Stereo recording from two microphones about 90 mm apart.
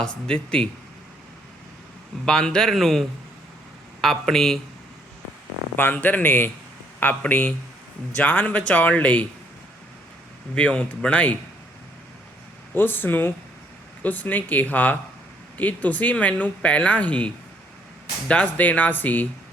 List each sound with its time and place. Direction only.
0.0 s speech: 10° left (ahead or behind)
2.2 s a man's voice: 10° left (ahead or behind)
5.7 s speech: 20° left (ahead or behind)
10.5 s speech: 10° left (ahead or behind)
12.7 s speech: 20° left (ahead or behind)